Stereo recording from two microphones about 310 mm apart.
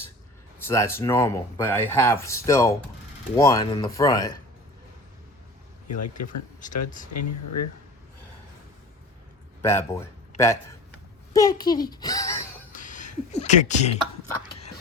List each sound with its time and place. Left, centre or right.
0.6 s speech: centre
5.9 s speech: left
6.2 s speech: left
7.1 s speech: left
9.6 s a man's voice: centre
12.7 s a sound: left